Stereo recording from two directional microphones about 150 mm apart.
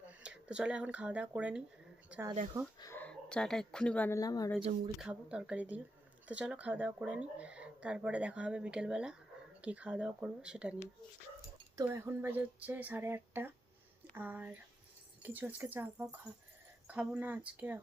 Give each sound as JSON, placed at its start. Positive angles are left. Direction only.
{"t": 0.2, "sound": "speech", "side_deg": -5}
{"t": 2.8, "sound": "speech", "side_deg": 15}
{"t": 4.2, "sound": "a woman's voice", "side_deg": 25}
{"t": 4.9, "sound": "speech", "side_deg": -5}
{"t": 11.9, "sound": "speech", "side_deg": -15}